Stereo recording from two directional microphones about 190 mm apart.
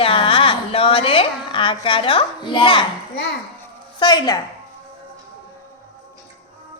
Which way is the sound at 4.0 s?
20° left (ahead or behind).